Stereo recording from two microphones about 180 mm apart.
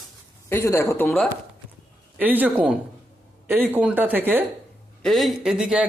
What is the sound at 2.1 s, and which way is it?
Speech, 10° right (ahead or behind).